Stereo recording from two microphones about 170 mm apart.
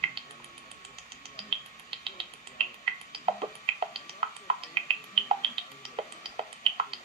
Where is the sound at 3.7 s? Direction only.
30° right (ahead or behind).